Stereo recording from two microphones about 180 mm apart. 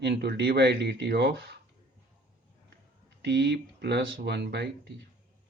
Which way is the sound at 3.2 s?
70° right (ahead or behind).